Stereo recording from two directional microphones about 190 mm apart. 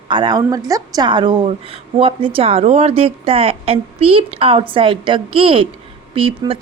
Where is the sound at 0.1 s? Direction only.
20° right (ahead or behind).